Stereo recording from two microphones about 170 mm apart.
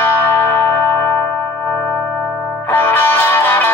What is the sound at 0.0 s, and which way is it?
Music, 10° left (ahead or behind).